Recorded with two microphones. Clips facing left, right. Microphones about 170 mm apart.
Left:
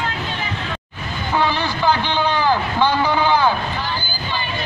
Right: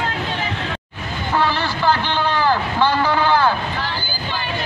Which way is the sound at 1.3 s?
15° left (ahead or behind).